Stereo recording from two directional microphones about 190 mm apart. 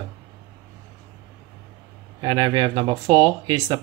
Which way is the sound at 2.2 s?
20° right (ahead or behind).